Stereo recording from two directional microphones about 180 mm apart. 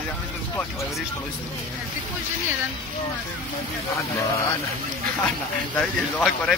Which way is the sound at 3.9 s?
15° left (ahead or behind).